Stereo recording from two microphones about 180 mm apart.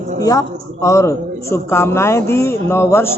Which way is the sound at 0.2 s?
20° left (ahead or behind).